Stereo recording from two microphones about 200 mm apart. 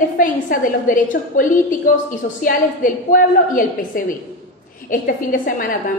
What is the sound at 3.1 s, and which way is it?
A woman's voice, 45° left (ahead or behind).